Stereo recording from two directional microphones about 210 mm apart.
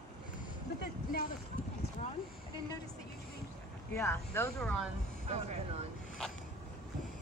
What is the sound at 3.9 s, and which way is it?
Speech, 10° left (ahead or behind).